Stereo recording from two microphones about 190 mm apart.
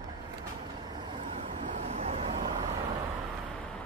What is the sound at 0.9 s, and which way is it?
Vehicle, 25° right (ahead or behind).